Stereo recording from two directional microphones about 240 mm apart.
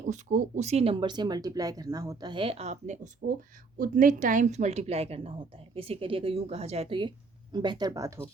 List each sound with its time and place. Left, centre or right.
0.0 s speech: right; by 8.2 s centre